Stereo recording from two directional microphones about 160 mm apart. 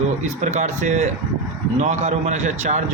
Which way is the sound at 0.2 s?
50° right (ahead or behind).